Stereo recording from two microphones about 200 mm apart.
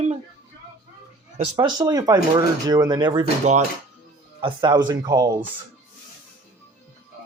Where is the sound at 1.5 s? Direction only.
20° right (ahead or behind).